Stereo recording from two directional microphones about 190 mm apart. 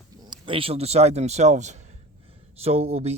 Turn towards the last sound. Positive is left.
turn(degrees=-35)  # may be behind; listen again after turning